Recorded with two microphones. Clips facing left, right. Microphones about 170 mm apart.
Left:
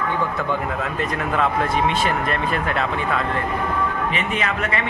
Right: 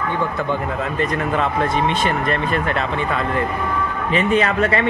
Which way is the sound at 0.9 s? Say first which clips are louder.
Right 3 dB; 5° left (ahead or behind).